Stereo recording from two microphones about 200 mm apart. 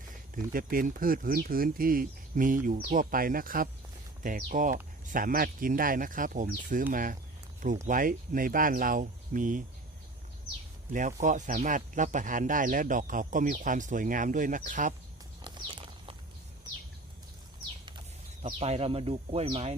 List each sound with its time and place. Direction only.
0.1 s speech: 45° right (ahead or behind)
10.9 s speech: 40° right (ahead or behind)
15.4 s horse: 25° right (ahead or behind)
18.6 s speech: 30° right (ahead or behind)